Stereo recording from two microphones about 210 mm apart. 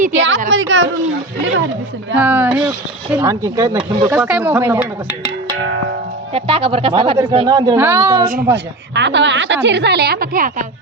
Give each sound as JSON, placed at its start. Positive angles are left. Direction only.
{"t": 0.1, "sound": "a woman's voice", "side_deg": -60}
{"t": 2.1, "sound": "speech", "side_deg": -10}
{"t": 4.1, "sound": "speech", "side_deg": -5}
{"t": 6.3, "sound": "a woman's voice", "side_deg": -25}
{"t": 8.5, "sound": "a woman's voice", "side_deg": -55}